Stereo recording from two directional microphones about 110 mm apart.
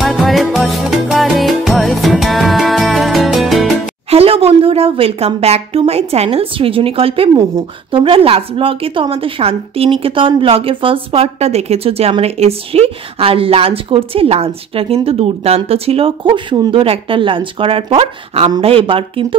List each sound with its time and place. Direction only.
0.0 s music: centre (ahead or behind)
4.1 s a woman's voice: 60° right (ahead or behind); by 16.8 s 45° right (ahead or behind)
16.8 s a woman's voice: 55° right (ahead or behind)